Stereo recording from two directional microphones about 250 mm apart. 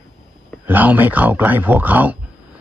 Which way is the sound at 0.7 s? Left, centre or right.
Centre.